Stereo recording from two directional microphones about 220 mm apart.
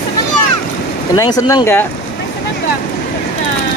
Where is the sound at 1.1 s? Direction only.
15° left (ahead or behind).